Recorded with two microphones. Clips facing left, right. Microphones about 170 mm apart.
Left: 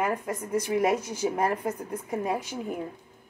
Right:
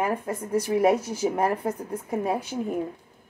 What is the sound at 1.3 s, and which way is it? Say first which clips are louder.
Speech: right 2 dB; 30° right (ahead or behind).